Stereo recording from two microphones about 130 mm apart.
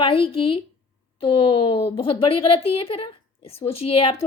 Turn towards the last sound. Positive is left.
turn(degrees=45)  # may be behind; listen again after turning